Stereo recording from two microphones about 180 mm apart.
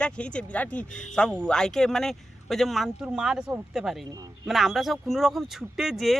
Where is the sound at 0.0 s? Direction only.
5° left (ahead or behind).